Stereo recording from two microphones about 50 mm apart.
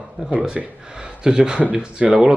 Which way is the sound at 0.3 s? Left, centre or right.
Right.